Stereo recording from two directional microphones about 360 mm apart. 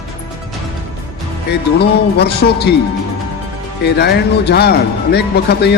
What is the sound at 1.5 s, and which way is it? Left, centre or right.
Speech, left.